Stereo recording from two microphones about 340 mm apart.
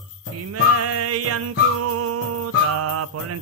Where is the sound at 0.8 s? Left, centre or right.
Right.